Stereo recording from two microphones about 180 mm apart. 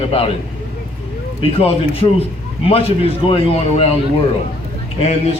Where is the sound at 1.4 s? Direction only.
30° left (ahead or behind).